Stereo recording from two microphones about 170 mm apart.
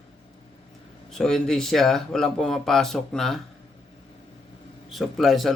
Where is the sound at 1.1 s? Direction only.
5° left (ahead or behind).